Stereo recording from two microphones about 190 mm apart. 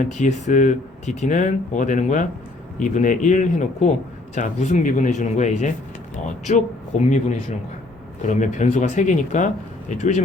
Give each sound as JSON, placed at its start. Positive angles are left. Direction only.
{"t": 0.1, "sound": "speech", "side_deg": 40}